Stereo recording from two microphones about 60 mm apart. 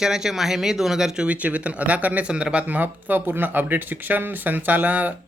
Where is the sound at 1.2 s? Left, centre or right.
Right.